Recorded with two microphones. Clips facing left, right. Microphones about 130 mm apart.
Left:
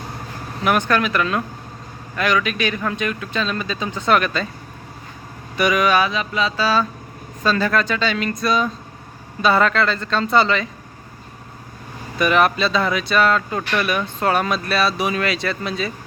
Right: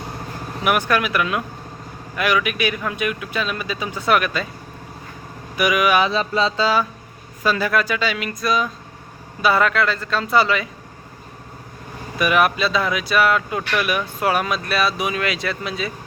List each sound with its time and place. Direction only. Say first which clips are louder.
0.6 s speech: left 1 dB; 10° right (ahead or behind)
5.5 s speech: left 1 dB; 5° right (ahead or behind)
6.1 s a sound: right 2 dB; 30° right (ahead or behind)
6.6 s speech: even; 15° right (ahead or behind)
12.1 s speech: left 1 dB; 5° right (ahead or behind)